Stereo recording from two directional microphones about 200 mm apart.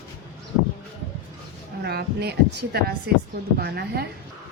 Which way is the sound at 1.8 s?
55° right (ahead or behind).